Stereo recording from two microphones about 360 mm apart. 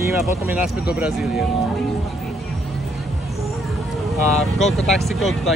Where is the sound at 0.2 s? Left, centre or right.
Centre.